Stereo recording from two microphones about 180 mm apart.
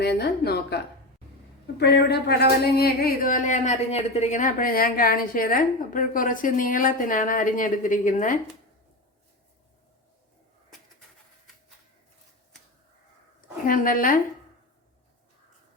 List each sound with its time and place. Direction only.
0.0 s a woman's voice: 65° left (ahead or behind)
1.8 s speech: 65° left (ahead or behind); by 8.4 s 45° left (ahead or behind)
13.7 s speech: 50° left (ahead or behind)